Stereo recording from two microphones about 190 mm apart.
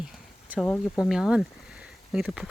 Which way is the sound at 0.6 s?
10° left (ahead or behind).